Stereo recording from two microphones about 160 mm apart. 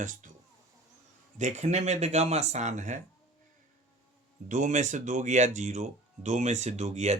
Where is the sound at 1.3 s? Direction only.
45° right (ahead or behind).